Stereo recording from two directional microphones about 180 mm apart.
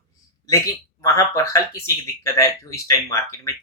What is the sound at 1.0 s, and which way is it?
Speech, 20° left (ahead or behind).